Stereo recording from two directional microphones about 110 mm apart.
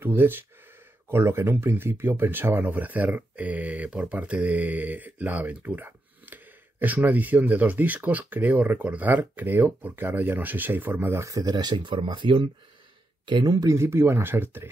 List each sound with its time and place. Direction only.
0.0 s speech: 20° right (ahead or behind)